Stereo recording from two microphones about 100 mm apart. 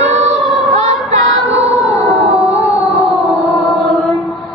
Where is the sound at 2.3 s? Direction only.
90° right.